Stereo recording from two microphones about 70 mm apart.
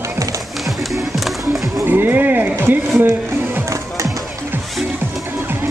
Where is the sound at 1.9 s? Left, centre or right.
Right.